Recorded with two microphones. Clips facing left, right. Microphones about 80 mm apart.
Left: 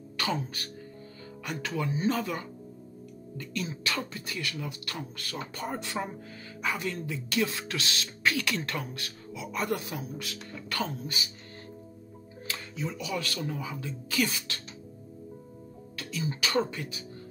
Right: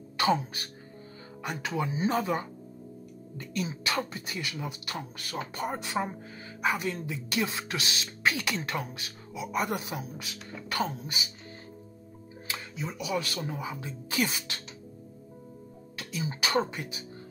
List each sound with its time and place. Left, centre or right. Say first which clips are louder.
0.2 s speech: right 5 dB; right
12.4 s speech: left 1 dB; centre
16.0 s speech: even; right